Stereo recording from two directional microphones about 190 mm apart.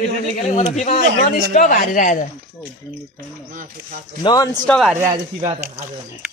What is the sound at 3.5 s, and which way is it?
Speech, 45° right (ahead or behind).